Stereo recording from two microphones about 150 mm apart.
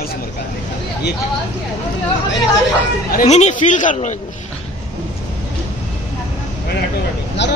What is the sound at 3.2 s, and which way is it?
Speech, 50° left (ahead or behind).